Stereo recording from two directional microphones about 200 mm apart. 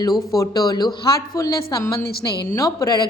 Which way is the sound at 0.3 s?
20° left (ahead or behind).